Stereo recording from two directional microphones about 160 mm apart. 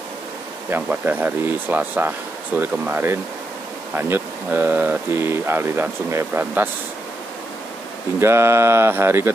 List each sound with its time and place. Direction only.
0.7 s speech: 10° right (ahead or behind)
8.2 s speech: 15° right (ahead or behind)